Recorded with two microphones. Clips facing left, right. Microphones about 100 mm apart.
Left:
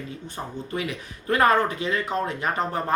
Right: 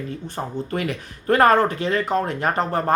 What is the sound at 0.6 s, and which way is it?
Speech, 55° right (ahead or behind).